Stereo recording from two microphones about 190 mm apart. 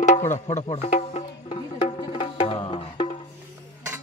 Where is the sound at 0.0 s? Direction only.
35° left (ahead or behind).